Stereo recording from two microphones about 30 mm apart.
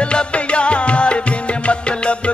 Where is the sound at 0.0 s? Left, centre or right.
Left.